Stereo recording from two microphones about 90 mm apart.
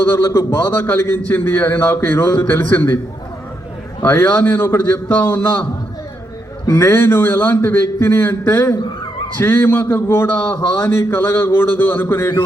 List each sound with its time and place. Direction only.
0.0 s a man's voice: 25° left (ahead or behind)
4.0 s a man's voice: 25° left (ahead or behind)
6.7 s a man's voice: 25° left (ahead or behind)